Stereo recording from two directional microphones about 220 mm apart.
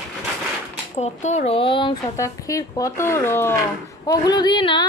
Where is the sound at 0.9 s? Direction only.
30° left (ahead or behind).